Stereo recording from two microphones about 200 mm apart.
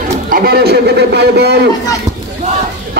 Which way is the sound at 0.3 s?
50° right (ahead or behind).